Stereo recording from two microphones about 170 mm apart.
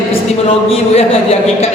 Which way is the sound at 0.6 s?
35° left (ahead or behind).